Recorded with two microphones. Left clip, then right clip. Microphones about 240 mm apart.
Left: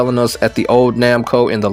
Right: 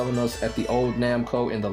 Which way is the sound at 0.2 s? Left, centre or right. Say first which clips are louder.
Left 12 dB; left.